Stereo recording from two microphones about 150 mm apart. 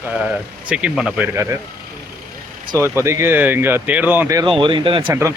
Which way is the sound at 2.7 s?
20° right (ahead or behind).